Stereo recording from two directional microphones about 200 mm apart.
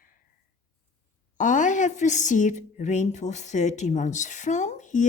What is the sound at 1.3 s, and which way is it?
A woman's voice, 40° left (ahead or behind).